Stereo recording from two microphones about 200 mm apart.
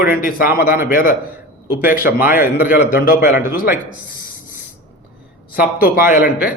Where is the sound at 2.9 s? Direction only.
45° left (ahead or behind).